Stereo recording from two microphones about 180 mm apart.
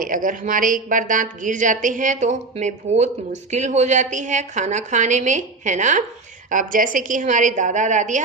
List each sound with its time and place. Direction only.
0.0 s a woman's voice: 50° right (ahead or behind)